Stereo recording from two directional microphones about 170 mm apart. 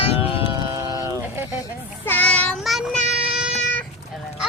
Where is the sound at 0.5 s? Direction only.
20° right (ahead or behind).